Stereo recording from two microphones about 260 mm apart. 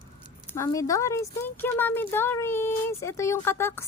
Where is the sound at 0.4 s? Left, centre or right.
Centre.